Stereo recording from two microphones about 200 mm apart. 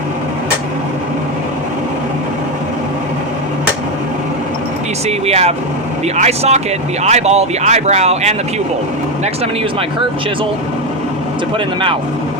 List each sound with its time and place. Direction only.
5.0 s speech: 30° right (ahead or behind)